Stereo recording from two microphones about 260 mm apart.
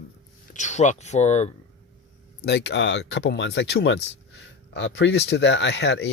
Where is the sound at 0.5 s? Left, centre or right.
Left.